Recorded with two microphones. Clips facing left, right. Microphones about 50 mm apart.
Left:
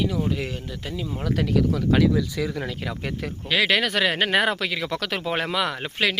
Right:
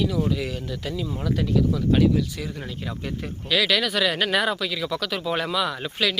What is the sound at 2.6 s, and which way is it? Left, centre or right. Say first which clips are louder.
Speech: left 2 dB; left.